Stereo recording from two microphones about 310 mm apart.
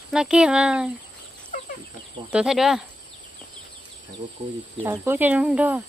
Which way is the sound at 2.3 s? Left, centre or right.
Centre.